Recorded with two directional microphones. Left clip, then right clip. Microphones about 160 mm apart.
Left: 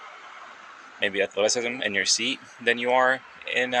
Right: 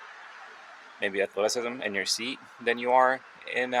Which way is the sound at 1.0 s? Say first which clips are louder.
Left 3 dB; 25° right (ahead or behind).